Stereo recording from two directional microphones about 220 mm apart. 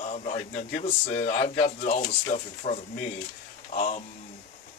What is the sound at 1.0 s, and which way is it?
Speech, 50° left (ahead or behind).